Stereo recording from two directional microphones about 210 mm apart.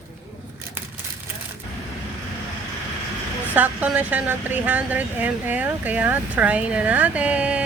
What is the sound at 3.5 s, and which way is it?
Speech, 5° right (ahead or behind).